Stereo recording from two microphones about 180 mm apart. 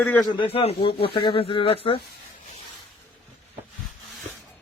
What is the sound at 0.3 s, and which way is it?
Speech, 35° left (ahead or behind).